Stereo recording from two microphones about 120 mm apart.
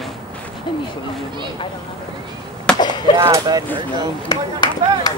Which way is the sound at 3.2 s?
25° right (ahead or behind).